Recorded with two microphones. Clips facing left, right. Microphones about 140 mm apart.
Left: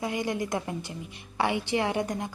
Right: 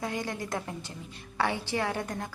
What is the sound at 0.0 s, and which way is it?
A woman's voice, 15° left (ahead or behind).